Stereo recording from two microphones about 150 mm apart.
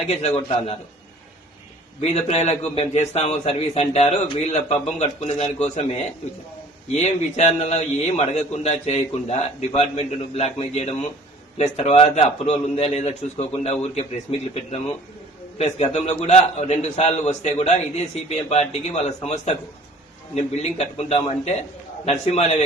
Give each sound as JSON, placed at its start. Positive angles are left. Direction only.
{"t": 0.1, "sound": "a man's voice", "side_deg": 45}
{"t": 2.0, "sound": "a man's voice", "side_deg": 45}